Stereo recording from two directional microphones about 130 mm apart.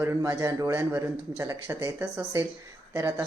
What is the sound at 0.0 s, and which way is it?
Speech, 20° right (ahead or behind).